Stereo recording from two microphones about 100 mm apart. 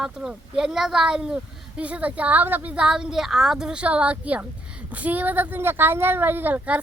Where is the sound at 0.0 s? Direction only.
5° right (ahead or behind).